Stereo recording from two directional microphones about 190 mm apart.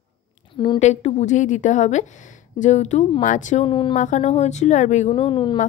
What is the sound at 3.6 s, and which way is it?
Speech, 25° left (ahead or behind).